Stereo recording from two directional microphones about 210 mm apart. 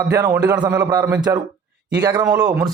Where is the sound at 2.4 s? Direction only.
5° right (ahead or behind).